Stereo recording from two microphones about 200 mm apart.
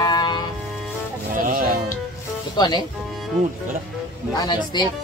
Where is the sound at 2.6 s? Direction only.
20° left (ahead or behind).